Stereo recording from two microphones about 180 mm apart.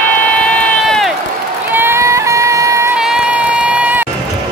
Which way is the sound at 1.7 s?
15° right (ahead or behind).